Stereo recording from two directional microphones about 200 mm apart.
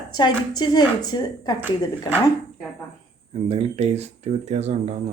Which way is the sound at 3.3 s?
30° right (ahead or behind).